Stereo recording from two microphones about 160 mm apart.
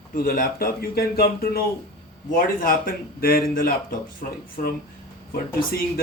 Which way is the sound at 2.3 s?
60° left (ahead or behind).